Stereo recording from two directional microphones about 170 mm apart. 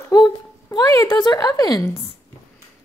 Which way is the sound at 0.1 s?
20° left (ahead or behind).